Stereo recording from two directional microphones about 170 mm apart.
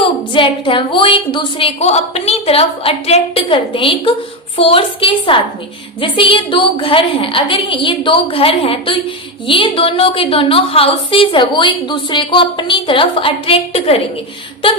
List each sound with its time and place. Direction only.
0.3 s a woman's voice: 30° left (ahead or behind)